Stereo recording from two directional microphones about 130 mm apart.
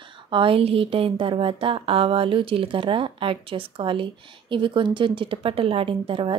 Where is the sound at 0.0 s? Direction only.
40° right (ahead or behind).